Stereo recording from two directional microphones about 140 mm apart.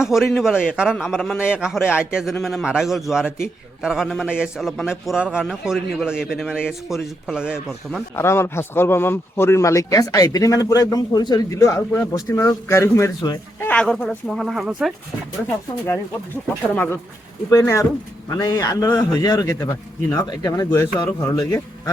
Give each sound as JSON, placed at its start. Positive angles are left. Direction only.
{"t": 0.0, "sound": "a man's voice", "side_deg": -5}
{"t": 8.1, "sound": "speech", "side_deg": 20}
{"t": 13.6, "sound": "a man's voice", "side_deg": 10}
{"t": 16.7, "sound": "speech", "side_deg": 10}
{"t": 17.5, "sound": "speech", "side_deg": 25}